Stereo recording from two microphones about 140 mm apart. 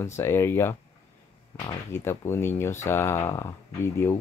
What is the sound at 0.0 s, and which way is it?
Speech, 20° left (ahead or behind).